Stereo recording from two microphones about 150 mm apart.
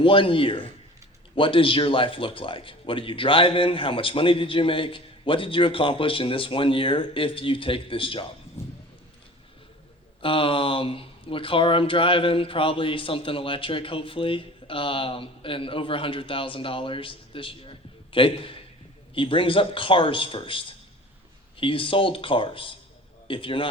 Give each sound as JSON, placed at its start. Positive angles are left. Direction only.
{"t": 0.0, "sound": "speech", "side_deg": 35}
{"t": 8.6, "sound": "a sound", "side_deg": 15}
{"t": 10.2, "sound": "speech", "side_deg": 35}